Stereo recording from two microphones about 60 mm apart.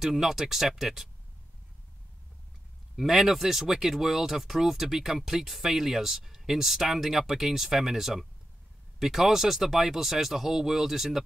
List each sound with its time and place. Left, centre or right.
0.0 s speech: centre
3.0 s speech: centre